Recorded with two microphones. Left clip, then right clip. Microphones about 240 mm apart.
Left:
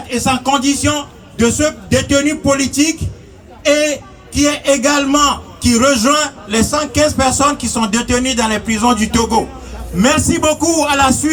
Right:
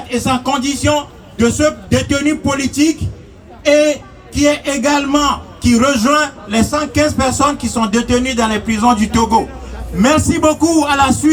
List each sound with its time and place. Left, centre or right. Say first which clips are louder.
0.1 s a man's voice: left 2 dB; left